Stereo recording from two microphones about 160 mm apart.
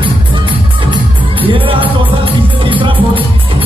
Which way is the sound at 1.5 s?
30° right (ahead or behind).